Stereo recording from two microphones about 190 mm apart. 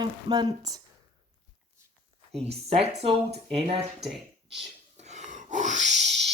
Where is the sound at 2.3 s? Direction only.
35° right (ahead or behind).